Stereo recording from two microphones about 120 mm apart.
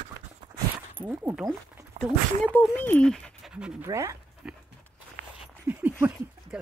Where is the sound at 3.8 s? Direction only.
25° right (ahead or behind).